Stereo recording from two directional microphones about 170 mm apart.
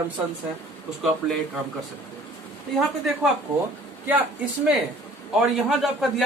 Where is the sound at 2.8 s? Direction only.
Centre (ahead or behind).